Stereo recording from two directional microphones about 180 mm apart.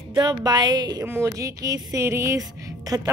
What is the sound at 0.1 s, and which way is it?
A woman's voice, 20° right (ahead or behind).